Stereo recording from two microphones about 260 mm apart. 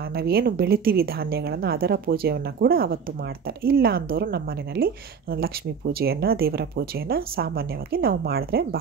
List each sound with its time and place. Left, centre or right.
0.1 s a woman's voice: right